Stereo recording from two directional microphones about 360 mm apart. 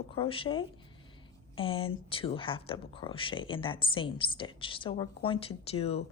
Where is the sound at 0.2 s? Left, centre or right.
Centre.